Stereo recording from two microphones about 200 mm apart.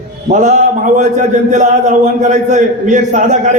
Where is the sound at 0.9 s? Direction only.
40° right (ahead or behind).